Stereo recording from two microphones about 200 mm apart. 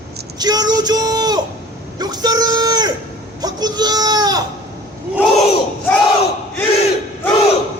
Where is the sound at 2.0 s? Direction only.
20° right (ahead or behind).